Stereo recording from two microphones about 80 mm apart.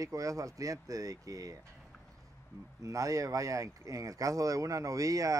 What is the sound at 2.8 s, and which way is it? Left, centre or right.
Speech, right.